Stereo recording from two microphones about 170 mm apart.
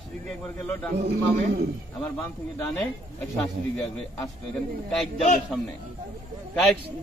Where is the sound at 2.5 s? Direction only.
5° left (ahead or behind).